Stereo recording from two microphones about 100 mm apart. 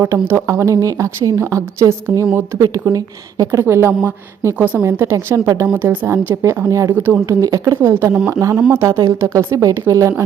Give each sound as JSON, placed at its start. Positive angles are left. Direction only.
{"t": 0.0, "sound": "a woman's voice", "side_deg": -25}
{"t": 5.7, "sound": "a woman's voice", "side_deg": -20}
{"t": 6.1, "sound": "a woman's voice", "side_deg": -30}
{"t": 6.9, "sound": "a woman's voice", "side_deg": -20}
{"t": 7.4, "sound": "a woman's voice", "side_deg": -35}
{"t": 7.8, "sound": "a woman's voice", "side_deg": -25}